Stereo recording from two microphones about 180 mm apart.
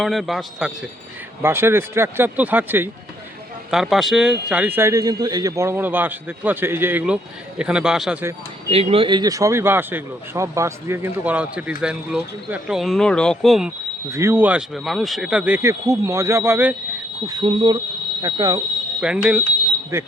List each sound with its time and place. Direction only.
0.0 s speech: centre (ahead or behind)
1.4 s speech: 15° right (ahead or behind)
8.7 s speech: 30° right (ahead or behind); by 13.7 s centre (ahead or behind)
14.1 s speech: 15° right (ahead or behind)
17.2 s speech: 25° right (ahead or behind)
18.9 s speech: 5° right (ahead or behind)
19.9 s speech: 15° right (ahead or behind)